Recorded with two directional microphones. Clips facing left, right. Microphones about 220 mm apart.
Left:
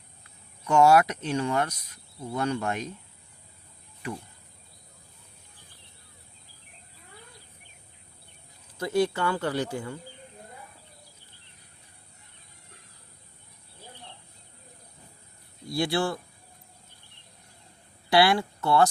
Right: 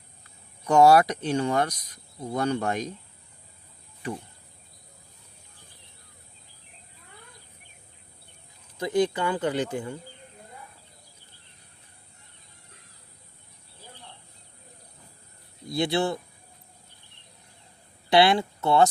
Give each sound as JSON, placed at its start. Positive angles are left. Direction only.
{"t": 0.7, "sound": "speech", "side_deg": -35}
{"t": 8.8, "sound": "speech", "side_deg": -15}
{"t": 15.6, "sound": "speech", "side_deg": -20}
{"t": 18.1, "sound": "speech", "side_deg": -20}